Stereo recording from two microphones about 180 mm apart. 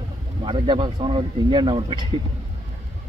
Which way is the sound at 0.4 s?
30° right (ahead or behind).